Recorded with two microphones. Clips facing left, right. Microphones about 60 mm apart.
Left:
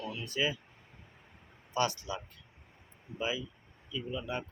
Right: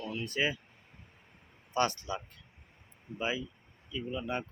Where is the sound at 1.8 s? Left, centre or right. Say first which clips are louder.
Right 1 dB; right.